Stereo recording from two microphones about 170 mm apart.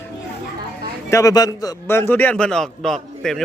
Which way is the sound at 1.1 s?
20° left (ahead or behind).